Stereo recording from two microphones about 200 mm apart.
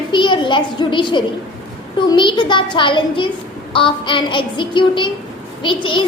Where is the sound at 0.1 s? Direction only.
25° left (ahead or behind).